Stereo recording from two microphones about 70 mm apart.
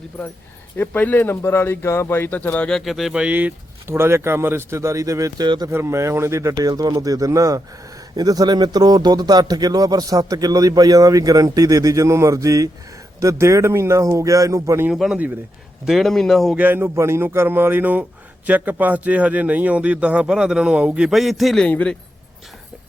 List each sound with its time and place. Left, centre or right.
0.8 s speech: left
2.6 s speech: centre
3.2 s speech: centre
3.8 s speech: right
5.7 s speech: right
6.6 s speech: right
8.1 s speech: right
14.9 s speech: centre
16.6 s speech: right
21.1 s speech: centre
21.7 s speech: left